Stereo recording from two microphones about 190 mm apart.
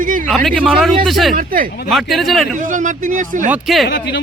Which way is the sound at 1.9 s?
Centre (ahead or behind).